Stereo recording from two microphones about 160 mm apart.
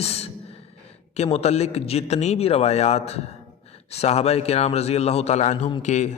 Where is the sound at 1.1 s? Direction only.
40° left (ahead or behind).